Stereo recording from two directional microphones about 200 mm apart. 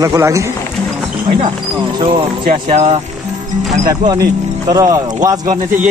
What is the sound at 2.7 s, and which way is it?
Speech, 30° right (ahead or behind).